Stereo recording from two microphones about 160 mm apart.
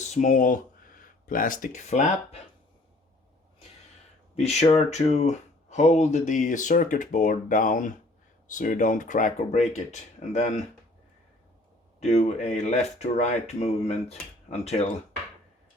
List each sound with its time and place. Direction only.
0.0 s speech: 50° left (ahead or behind)
4.4 s speech: 40° left (ahead or behind)
11.9 s speech: 45° left (ahead or behind)